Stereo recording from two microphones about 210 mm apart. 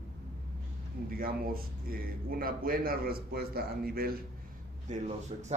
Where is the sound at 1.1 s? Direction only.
45° right (ahead or behind).